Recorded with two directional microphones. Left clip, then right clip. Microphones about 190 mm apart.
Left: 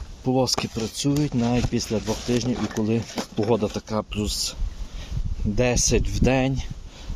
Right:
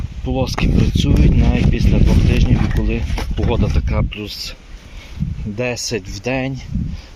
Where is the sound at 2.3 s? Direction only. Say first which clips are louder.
Right 4 dB; 20° left (ahead or behind).